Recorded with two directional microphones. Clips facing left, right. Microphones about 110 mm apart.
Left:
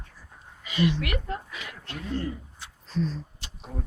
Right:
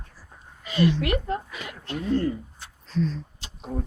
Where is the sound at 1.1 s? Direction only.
25° right (ahead or behind).